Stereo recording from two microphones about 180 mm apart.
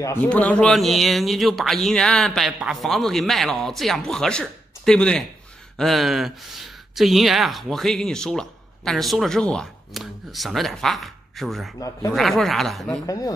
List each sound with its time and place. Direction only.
0.0 s speech: 10° left (ahead or behind)
13.0 s speech: 20° left (ahead or behind)